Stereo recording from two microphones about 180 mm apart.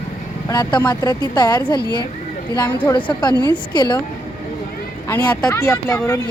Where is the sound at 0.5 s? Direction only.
25° left (ahead or behind).